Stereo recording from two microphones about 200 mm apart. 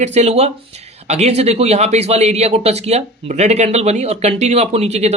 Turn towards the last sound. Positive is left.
turn(degrees=-30)  # may be behind; listen again after turning